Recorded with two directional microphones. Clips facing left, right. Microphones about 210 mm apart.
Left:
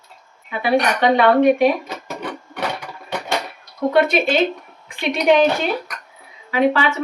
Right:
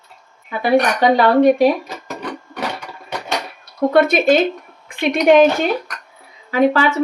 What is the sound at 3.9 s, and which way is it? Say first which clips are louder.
A woman's voice: right 4 dB; 45° right (ahead or behind).